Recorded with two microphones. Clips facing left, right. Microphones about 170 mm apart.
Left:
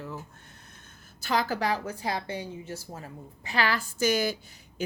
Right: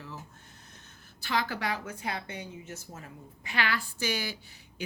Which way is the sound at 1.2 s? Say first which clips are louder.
Left 4 dB; 40° left (ahead or behind).